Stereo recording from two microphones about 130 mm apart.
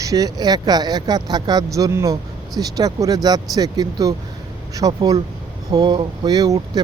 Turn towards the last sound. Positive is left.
turn(degrees=-30)  # may be behind; listen again after turning